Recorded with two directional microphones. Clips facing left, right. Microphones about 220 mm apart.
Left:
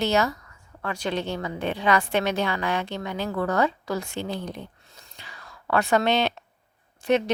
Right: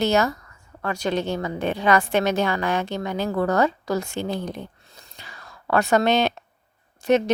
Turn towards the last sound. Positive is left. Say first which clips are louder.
# right 3 dB
turn(degrees=-45)  # may be behind; listen again after turning